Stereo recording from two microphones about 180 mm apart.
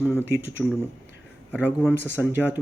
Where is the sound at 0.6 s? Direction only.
Centre (ahead or behind).